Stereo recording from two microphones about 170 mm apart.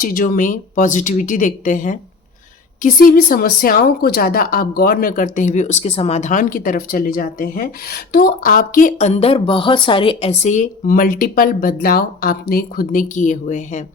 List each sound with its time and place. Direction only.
0.0 s speech: 55° left (ahead or behind)